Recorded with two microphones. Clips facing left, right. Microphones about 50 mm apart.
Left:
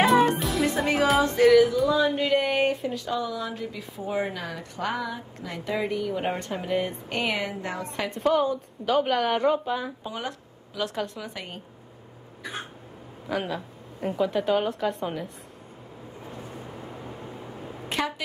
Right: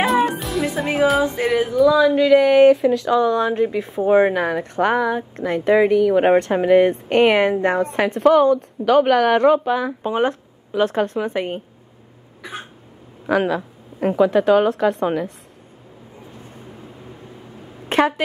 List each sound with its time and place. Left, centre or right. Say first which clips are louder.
0.0 s music: right 2 dB; centre
1.2 s music: left 2 dB; centre
1.8 s speech: right 9 dB; right
5.8 s speech: right 12 dB; right
7.9 s a woman's voice: right 8 dB; right
10.0 s speech: right 14 dB; right
13.3 s speech: right 11 dB; right
14.0 s a woman's voice: right 10 dB; right
17.8 s a woman's voice: right 11 dB; right